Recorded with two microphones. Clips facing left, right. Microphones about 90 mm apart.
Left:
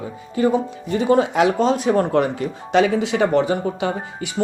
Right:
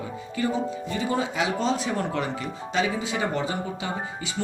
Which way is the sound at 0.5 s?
60° left (ahead or behind).